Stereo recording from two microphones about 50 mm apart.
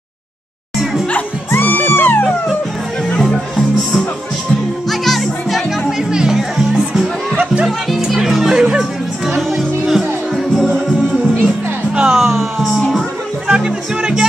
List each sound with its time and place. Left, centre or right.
1.5 s music: left
3.1 s music: centre
5.9 s music: centre
9.6 s music: centre
11.3 s music: right
12.1 s music: centre
13.5 s music: centre